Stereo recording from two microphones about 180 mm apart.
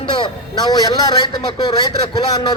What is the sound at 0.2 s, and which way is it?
A man's voice, 20° left (ahead or behind).